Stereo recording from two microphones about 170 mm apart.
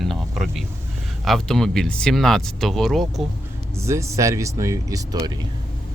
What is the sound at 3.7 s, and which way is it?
Speech, 15° right (ahead or behind).